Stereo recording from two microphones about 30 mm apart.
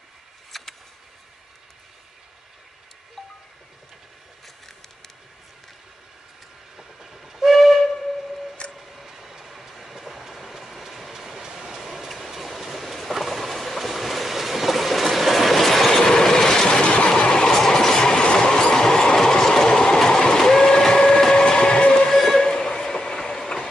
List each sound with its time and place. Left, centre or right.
0.5 s vehicle: centre
3.2 s wind chime: centre
6.8 s train: centre
7.5 s steam whistle: centre
7.9 s a sound: centre
8.3 s music: centre
8.7 s train: centre
11.8 s train: centre
12.8 s vehicle: centre
13.1 s train: centre; by 20.0 s left
20.1 s printer: left
21.2 s train: left
22.1 s train: centre